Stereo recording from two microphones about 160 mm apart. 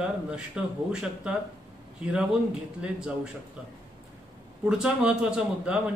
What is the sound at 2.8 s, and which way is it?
Speech, 5° right (ahead or behind).